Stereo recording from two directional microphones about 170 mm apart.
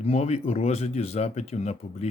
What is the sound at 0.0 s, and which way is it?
Speech, 40° left (ahead or behind).